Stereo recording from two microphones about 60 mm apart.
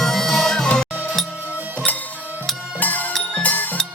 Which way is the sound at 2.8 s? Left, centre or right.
Left.